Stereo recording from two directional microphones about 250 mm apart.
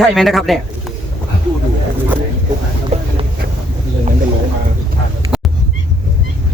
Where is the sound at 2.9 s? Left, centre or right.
Right.